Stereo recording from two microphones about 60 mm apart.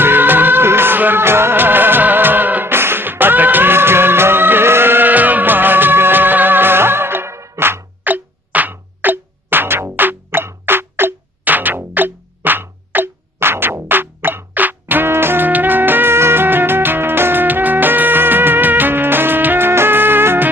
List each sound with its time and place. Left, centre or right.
0.0 s music: right
8.0 s music: right